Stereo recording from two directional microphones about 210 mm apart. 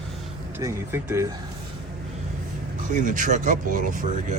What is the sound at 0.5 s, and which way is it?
Speech, 10° right (ahead or behind).